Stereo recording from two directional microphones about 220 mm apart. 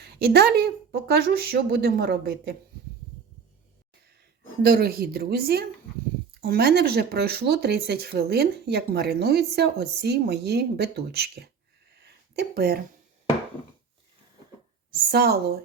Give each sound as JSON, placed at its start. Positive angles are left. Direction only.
{"t": 0.0, "sound": "speech", "side_deg": -45}
{"t": 4.6, "sound": "speech", "side_deg": -45}
{"t": 11.9, "sound": "a sound", "side_deg": -50}
{"t": 14.8, "sound": "speech", "side_deg": -45}